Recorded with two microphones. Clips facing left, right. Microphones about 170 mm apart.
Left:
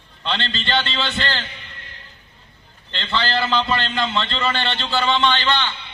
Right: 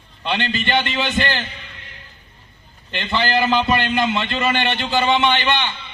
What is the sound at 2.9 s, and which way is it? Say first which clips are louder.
A man's voice: right 3 dB; 15° right (ahead or behind).